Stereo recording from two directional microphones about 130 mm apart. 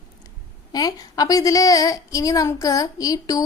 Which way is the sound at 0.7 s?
30° left (ahead or behind).